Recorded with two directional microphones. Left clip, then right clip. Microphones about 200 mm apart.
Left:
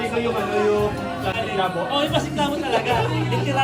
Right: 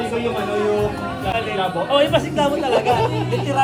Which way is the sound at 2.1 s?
15° left (ahead or behind).